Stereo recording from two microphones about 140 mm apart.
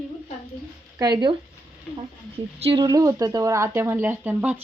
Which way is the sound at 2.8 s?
25° right (ahead or behind).